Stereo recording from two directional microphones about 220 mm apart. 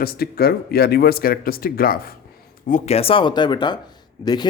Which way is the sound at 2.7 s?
30° left (ahead or behind).